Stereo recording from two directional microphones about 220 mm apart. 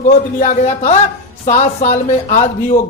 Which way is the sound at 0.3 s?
35° left (ahead or behind).